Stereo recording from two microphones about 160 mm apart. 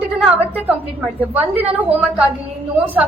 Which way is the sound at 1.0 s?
10° right (ahead or behind).